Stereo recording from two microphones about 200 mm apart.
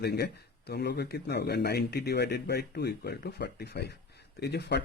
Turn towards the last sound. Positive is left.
turn(degrees=55)  # may be behind; listen again after turning